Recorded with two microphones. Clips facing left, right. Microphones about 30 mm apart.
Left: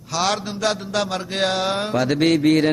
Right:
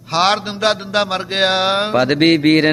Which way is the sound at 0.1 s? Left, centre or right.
Right.